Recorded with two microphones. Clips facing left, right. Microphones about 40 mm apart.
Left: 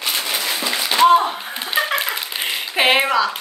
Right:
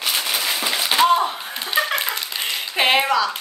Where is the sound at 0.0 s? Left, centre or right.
Centre.